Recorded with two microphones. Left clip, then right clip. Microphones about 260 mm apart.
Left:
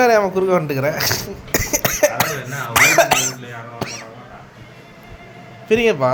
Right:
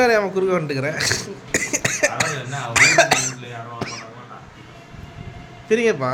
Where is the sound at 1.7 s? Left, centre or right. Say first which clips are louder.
Left 5 dB; centre.